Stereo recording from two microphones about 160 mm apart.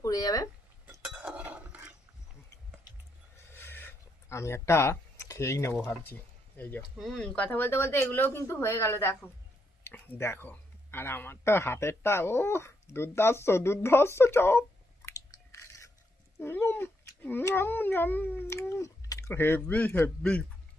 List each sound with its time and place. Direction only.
0.0 s speech: 20° left (ahead or behind)
1.0 s dishes: 5° right (ahead or behind)
3.3 s a sound: 15° left (ahead or behind)
6.6 s speech: 10° left (ahead or behind)
15.0 s biting: 20° left (ahead or behind)
16.4 s cat: 15° left (ahead or behind)